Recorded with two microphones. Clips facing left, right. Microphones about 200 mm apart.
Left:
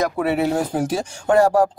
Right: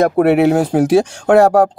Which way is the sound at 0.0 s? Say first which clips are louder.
Right 9 dB; 60° right (ahead or behind).